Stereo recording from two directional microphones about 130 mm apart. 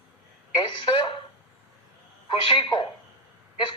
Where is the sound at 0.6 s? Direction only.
35° left (ahead or behind).